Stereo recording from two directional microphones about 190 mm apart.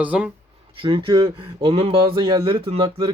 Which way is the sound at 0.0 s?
5° right (ahead or behind).